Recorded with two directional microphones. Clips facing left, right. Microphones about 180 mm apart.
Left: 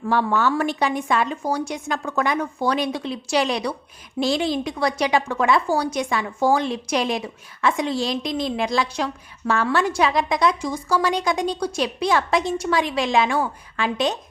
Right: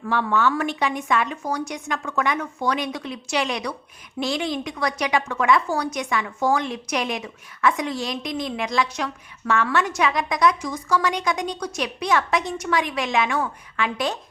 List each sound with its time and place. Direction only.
0.0 s a woman's voice: 35° left (ahead or behind)